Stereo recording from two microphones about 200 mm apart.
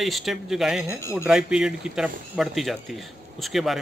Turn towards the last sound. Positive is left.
turn(degrees=0)  # may be behind; listen again after turning